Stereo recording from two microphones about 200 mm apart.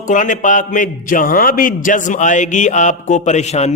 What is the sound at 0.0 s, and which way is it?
A man's voice, 40° left (ahead or behind).